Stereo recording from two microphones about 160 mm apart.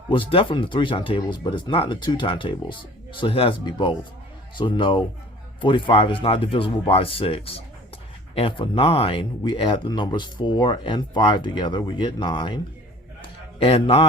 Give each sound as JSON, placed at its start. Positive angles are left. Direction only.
{"t": 0.1, "sound": "speech", "side_deg": 35}
{"t": 13.6, "sound": "speech", "side_deg": 35}